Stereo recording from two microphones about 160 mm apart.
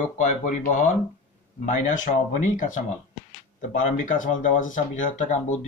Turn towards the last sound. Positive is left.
turn(degrees=50)  # may be behind; listen again after turning